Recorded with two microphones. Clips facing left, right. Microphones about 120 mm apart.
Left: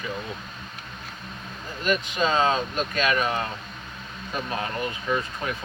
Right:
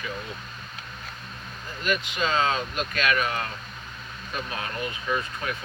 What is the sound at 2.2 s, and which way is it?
Speech, 25° left (ahead or behind).